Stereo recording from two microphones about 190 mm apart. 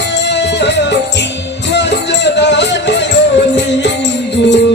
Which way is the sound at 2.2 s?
65° left (ahead or behind).